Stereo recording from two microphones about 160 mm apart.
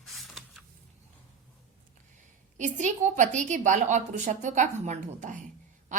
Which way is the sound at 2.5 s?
50° right (ahead or behind).